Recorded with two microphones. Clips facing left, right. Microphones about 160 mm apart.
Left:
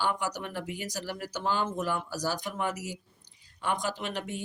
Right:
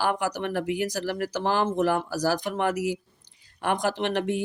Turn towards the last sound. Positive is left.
turn(degrees=-75)  # may be behind; listen again after turning